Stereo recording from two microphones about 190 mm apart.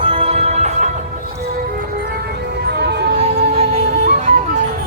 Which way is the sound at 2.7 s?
60° right (ahead or behind).